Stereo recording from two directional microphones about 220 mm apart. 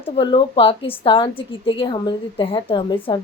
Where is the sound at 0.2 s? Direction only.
20° left (ahead or behind).